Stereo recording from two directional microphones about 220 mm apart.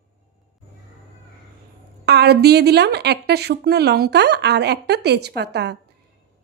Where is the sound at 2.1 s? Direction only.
50° right (ahead or behind).